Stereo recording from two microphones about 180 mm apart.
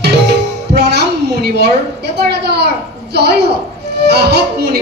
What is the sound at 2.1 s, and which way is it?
A man's voice, 65° right (ahead or behind).